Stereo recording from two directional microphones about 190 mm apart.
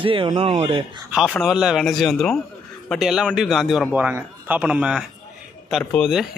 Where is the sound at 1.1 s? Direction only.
Centre (ahead or behind).